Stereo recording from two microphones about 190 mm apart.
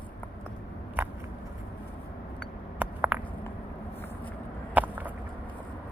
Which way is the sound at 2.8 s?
10° right (ahead or behind).